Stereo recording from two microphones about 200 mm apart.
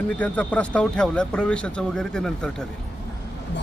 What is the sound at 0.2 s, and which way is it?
Speech, 5° left (ahead or behind).